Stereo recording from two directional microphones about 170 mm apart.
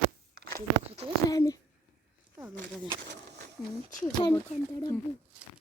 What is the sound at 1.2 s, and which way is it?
Speech, 20° left (ahead or behind).